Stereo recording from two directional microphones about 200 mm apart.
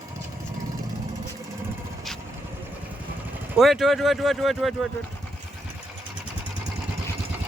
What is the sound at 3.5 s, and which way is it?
Speech, centre (ahead or behind).